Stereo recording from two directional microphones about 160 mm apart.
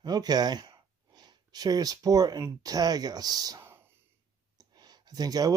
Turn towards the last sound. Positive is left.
turn(degrees=-25)  # may be behind; listen again after turning